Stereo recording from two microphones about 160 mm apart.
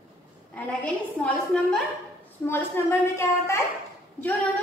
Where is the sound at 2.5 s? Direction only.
15° left (ahead or behind).